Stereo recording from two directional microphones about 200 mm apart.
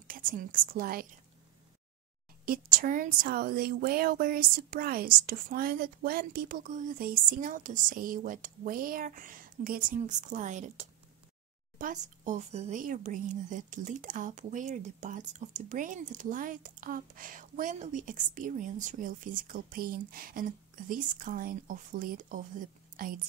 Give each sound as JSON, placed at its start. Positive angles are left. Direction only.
{"t": 0.1, "sound": "speech", "side_deg": -45}
{"t": 2.4, "sound": "speech", "side_deg": -45}